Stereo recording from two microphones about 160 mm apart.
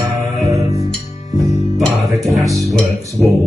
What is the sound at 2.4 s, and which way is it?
Music, centre (ahead or behind).